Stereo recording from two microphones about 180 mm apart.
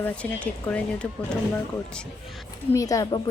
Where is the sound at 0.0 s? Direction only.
5° left (ahead or behind).